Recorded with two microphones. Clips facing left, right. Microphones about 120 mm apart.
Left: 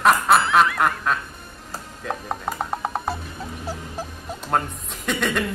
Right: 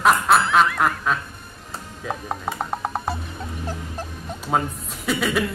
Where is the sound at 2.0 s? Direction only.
Centre (ahead or behind).